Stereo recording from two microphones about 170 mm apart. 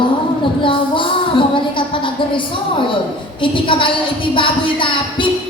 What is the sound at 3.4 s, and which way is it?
Speech, 30° left (ahead or behind).